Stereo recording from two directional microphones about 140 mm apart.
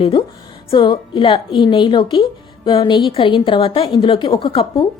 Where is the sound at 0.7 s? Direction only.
35° left (ahead or behind).